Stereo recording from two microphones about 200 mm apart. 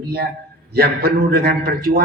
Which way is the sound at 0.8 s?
50° right (ahead or behind).